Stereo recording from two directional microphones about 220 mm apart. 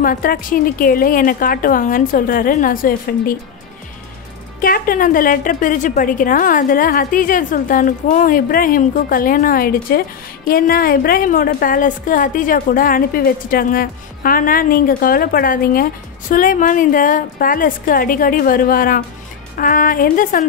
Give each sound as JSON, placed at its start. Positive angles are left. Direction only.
{"t": 0.0, "sound": "a woman's voice", "side_deg": 40}
{"t": 4.6, "sound": "a woman's voice", "side_deg": 40}